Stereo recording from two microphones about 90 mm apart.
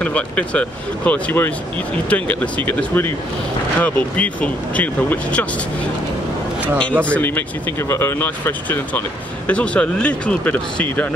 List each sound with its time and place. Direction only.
0.0 s speech: 15° left (ahead or behind)
7.2 s speech: 20° left (ahead or behind)